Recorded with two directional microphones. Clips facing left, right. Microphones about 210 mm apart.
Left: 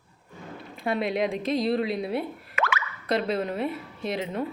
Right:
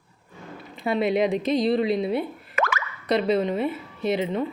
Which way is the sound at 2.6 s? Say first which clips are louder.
Right 3 dB; 45° right (ahead or behind).